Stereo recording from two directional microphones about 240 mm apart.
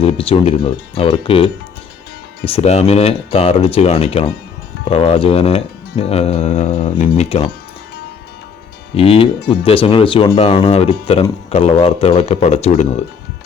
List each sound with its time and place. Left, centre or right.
0.0 s speech: left
9.0 s speech: left